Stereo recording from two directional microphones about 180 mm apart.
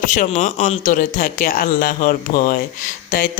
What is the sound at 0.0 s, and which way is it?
A man's voice, 45° left (ahead or behind).